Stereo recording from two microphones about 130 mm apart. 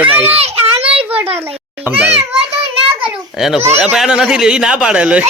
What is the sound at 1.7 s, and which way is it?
Speech, 15° right (ahead or behind).